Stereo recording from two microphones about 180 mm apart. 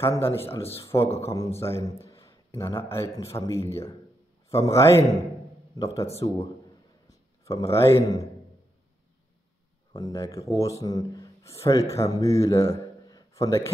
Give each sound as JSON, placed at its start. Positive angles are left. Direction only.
{"t": 0.0, "sound": "speech", "side_deg": 15}
{"t": 0.7, "sound": "speech", "side_deg": 30}
{"t": 0.9, "sound": "a man's voice", "side_deg": 15}
{"t": 6.2, "sound": "a man's voice", "side_deg": 25}
{"t": 9.9, "sound": "a man's voice", "side_deg": 20}